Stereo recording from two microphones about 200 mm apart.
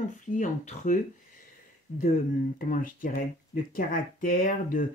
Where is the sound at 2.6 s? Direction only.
45° left (ahead or behind).